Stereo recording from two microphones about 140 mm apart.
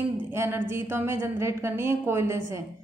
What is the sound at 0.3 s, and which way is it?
A woman's voice, 15° right (ahead or behind).